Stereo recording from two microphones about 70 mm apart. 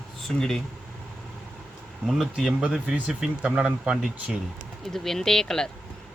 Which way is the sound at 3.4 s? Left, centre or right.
Centre.